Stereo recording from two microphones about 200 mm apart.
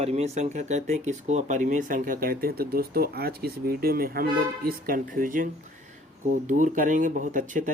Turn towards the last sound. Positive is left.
turn(degrees=-40)  # may be behind; listen again after turning